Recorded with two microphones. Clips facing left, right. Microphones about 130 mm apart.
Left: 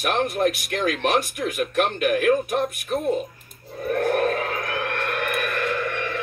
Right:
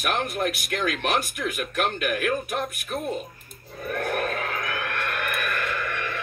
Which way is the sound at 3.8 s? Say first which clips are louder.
Left 6 dB; 35° left (ahead or behind).